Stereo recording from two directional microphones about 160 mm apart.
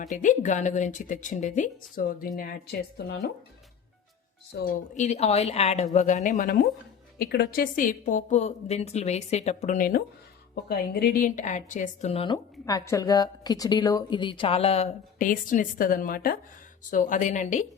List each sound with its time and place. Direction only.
0.0 s a woman's voice: 50° left (ahead or behind)
3.0 s speech: 90° left
4.5 s a woman's voice: 65° left (ahead or behind)
7.2 s a woman's voice: 85° left; by 10.0 s 60° left (ahead or behind)
10.5 s a woman's voice: 75° left (ahead or behind); by 14.8 s 40° left (ahead or behind)
15.2 s a woman's voice: 55° left (ahead or behind)
16.9 s a woman's voice: 50° left (ahead or behind)